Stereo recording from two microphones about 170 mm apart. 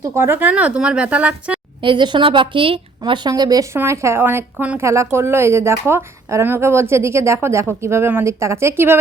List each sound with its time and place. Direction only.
0.0 s speech: 15° right (ahead or behind)
1.8 s a woman's voice: 30° right (ahead or behind)